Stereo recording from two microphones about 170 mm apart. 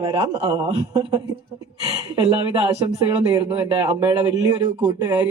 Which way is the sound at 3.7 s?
10° right (ahead or behind).